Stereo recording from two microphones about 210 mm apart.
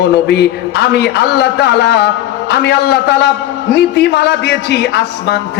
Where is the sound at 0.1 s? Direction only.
55° left (ahead or behind).